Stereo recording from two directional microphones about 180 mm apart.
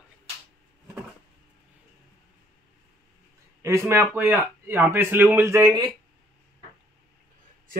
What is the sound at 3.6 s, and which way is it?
Speech, 15° right (ahead or behind).